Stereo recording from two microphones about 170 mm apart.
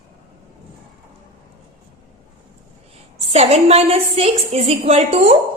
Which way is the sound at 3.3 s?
35° right (ahead or behind).